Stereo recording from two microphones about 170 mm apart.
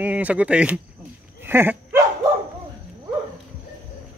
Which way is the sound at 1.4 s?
10° right (ahead or behind).